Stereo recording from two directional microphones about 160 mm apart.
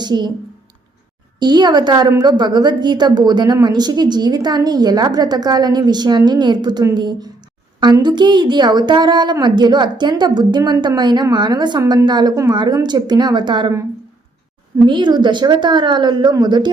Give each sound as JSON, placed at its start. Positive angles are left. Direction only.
{"t": 0.0, "sound": "speech", "side_deg": -30}
{"t": 1.4, "sound": "a woman's voice", "side_deg": -25}
{"t": 14.8, "sound": "a woman's voice", "side_deg": -30}